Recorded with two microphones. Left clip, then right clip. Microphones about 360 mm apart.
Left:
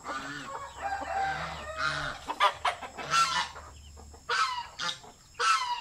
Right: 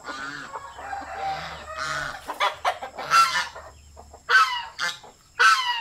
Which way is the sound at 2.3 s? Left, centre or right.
Centre.